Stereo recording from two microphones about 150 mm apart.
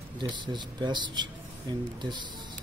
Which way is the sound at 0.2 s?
30° right (ahead or behind).